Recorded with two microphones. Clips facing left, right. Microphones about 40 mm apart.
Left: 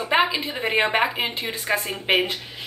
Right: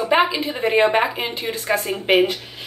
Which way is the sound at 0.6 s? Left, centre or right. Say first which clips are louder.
Right 4 dB; centre.